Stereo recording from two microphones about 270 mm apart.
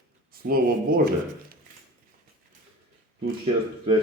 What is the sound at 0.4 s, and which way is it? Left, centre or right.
Speech, right.